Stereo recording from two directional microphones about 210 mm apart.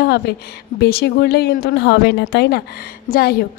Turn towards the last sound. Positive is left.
turn(degrees=45)  # may be behind; listen again after turning